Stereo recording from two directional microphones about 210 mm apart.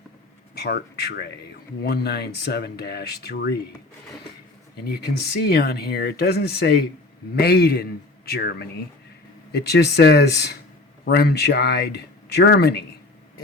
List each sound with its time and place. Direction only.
0.5 s speech: 50° left (ahead or behind)
4.9 s speech: 50° left (ahead or behind)